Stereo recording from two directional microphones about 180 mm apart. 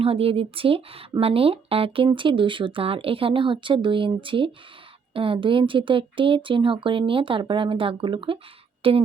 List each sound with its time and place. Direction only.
0.0 s speech: 30° right (ahead or behind)